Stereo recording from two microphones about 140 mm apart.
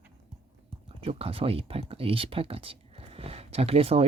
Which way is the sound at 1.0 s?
40° right (ahead or behind).